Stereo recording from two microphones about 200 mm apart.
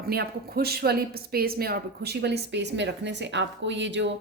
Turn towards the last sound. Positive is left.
turn(degrees=-60)  # may be behind; listen again after turning